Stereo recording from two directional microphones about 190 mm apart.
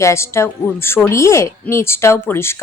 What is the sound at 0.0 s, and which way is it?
A woman's voice, 15° left (ahead or behind).